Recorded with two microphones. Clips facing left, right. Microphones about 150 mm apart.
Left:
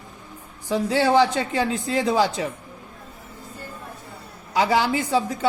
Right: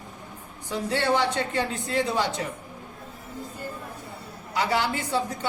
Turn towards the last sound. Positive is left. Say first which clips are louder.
# left 5 dB
turn(degrees=90)